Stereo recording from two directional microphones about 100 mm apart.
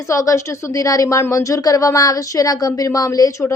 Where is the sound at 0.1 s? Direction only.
30° left (ahead or behind).